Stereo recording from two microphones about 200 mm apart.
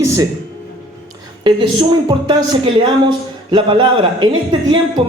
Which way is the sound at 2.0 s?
25° right (ahead or behind).